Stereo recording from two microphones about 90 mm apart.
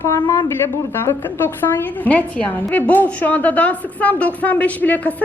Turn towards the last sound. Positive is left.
turn(degrees=15)  # may be behind; listen again after turning